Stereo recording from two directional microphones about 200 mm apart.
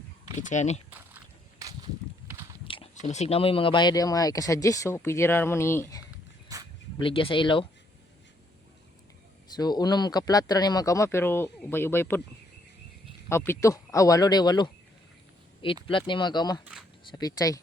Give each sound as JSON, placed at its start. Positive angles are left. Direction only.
{"t": 0.3, "sound": "speech", "side_deg": 35}
{"t": 0.9, "sound": "a sound", "side_deg": -10}
{"t": 2.6, "sound": "speech", "side_deg": 25}
{"t": 6.5, "sound": "a sound", "side_deg": -20}
{"t": 7.0, "sound": "speech", "side_deg": 25}
{"t": 9.5, "sound": "speech", "side_deg": 20}
{"t": 13.2, "sound": "speech", "side_deg": 10}